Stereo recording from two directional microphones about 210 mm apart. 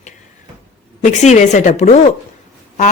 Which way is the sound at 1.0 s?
35° left (ahead or behind).